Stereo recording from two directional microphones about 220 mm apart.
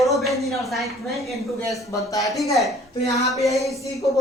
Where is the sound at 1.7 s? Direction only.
15° left (ahead or behind).